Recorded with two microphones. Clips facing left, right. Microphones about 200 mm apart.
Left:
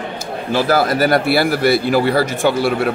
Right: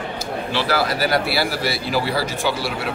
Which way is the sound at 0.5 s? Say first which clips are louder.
Left 7 dB; 45° left (ahead or behind).